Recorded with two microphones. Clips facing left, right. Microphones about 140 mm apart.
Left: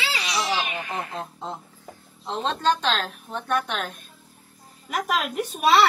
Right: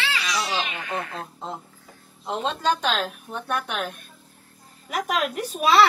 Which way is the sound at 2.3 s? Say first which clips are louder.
Left 1 dB; 10° right (ahead or behind).